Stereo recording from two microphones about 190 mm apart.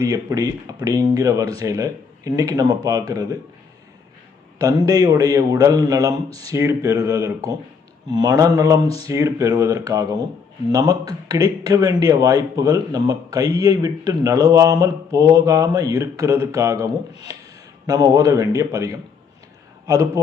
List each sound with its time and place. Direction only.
0.0 s speech: 20° right (ahead or behind)
4.5 s speech: 20° right (ahead or behind)